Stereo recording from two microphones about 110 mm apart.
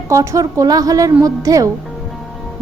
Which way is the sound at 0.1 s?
30° right (ahead or behind).